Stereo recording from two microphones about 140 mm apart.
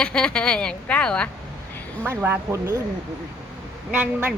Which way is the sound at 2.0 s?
15° right (ahead or behind).